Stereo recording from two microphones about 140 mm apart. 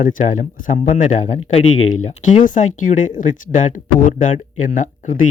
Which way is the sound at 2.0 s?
65° left (ahead or behind).